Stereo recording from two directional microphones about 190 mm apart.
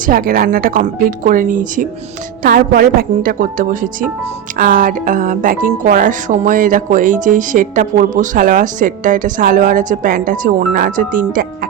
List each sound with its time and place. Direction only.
0.0 s speech: 50° right (ahead or behind)